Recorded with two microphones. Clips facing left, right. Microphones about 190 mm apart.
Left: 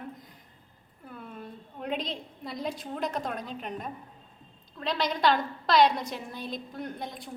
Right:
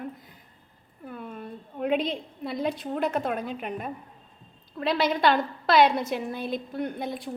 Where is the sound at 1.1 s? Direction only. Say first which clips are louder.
Right 4 dB; 5° right (ahead or behind).